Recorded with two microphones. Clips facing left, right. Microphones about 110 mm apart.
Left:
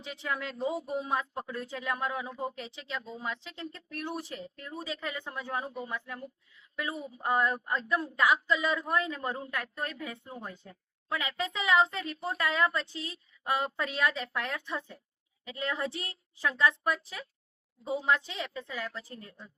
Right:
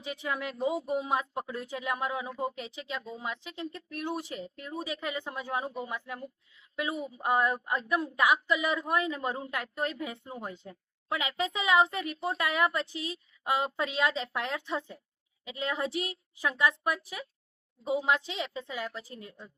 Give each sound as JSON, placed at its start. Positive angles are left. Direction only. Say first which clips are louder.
{"t": 0.0, "sound": "a woman's voice", "louder": "right 1 dB", "side_deg": -10}